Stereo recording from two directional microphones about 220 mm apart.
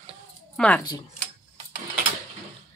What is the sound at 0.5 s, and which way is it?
Speech, 5° left (ahead or behind).